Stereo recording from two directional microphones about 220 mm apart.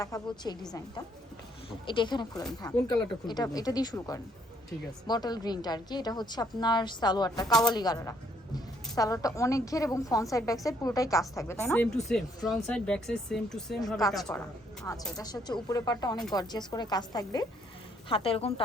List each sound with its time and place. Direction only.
0.0 s a woman's voice: 15° left (ahead or behind)
1.9 s a woman's voice: 20° left (ahead or behind)
7.4 s speech: 5° left (ahead or behind)
7.7 s a woman's voice: 20° left (ahead or behind)
15.2 s a woman's voice: 20° left (ahead or behind)